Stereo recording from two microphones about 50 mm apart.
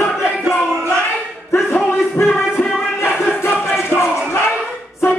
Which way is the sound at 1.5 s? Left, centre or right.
Left.